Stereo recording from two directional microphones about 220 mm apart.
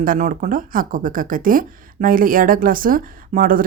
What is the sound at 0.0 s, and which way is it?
Speech, 35° right (ahead or behind).